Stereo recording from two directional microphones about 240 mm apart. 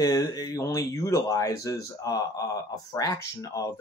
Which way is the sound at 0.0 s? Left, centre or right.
Centre.